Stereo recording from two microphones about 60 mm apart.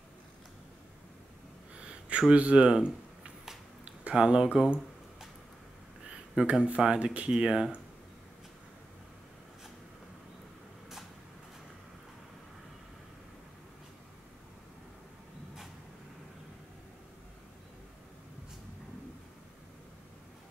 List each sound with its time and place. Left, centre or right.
1.8 s a sound: centre
3.8 s speech: centre
6.0 s speech: centre